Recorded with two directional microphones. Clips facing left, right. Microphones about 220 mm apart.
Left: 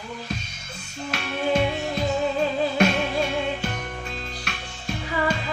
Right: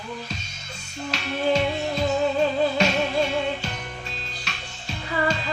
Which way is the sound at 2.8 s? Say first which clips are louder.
Left 6 dB; 55° left (ahead or behind).